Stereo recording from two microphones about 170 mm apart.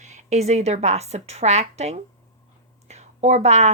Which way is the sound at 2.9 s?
40° right (ahead or behind).